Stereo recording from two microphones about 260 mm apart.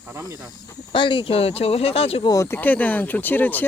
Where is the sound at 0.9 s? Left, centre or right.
Centre.